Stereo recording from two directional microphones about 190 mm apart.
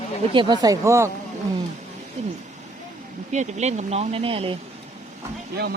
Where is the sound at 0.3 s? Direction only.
20° right (ahead or behind).